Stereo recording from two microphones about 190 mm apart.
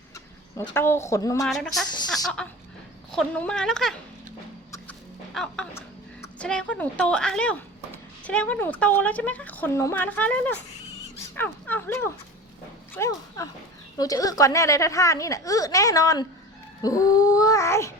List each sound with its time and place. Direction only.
0.5 s speech: 15° left (ahead or behind)
1.5 s a woman's voice: centre (ahead or behind)
5.3 s a woman's voice: centre (ahead or behind); by 16.2 s 20° left (ahead or behind)
16.8 s a sound: 20° left (ahead or behind)